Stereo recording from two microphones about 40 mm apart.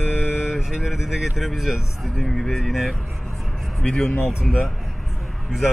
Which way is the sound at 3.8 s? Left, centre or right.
Left.